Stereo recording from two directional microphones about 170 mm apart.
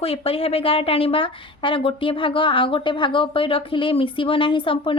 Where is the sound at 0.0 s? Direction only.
35° left (ahead or behind).